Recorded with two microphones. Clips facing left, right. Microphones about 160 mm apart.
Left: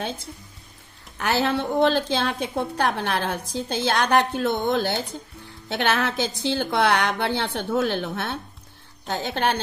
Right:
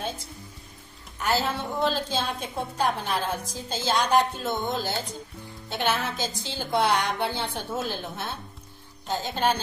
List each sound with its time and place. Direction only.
1.2 s a woman's voice: 70° left (ahead or behind)